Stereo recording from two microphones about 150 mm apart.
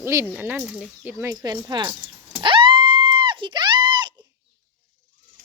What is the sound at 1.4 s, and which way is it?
Speech, 30° right (ahead or behind).